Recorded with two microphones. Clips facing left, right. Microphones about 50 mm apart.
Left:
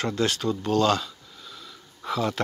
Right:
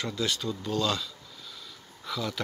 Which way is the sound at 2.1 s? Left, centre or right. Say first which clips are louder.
Left 7 dB; left.